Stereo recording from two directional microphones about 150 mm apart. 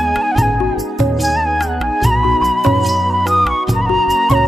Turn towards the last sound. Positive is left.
turn(degrees=0)  # may be behind; listen again after turning